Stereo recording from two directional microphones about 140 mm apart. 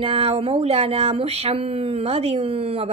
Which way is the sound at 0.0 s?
45° right (ahead or behind).